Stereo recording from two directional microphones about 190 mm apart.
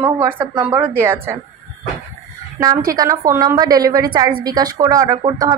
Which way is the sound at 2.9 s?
15° right (ahead or behind).